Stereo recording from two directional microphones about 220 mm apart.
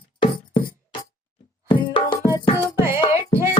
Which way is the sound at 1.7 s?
20° left (ahead or behind).